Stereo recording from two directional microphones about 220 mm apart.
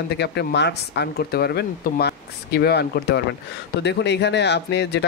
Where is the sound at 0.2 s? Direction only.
50° left (ahead or behind).